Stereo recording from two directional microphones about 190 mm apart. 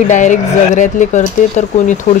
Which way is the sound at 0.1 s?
40° left (ahead or behind).